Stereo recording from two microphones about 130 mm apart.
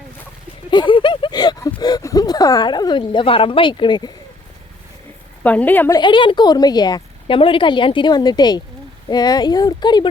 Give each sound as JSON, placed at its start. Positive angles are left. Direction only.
{"t": 0.7, "sound": "a sound", "side_deg": 35}
{"t": 1.8, "sound": "speech", "side_deg": 30}
{"t": 5.4, "sound": "a woman's voice", "side_deg": 10}
{"t": 5.9, "sound": "a woman's voice", "side_deg": 35}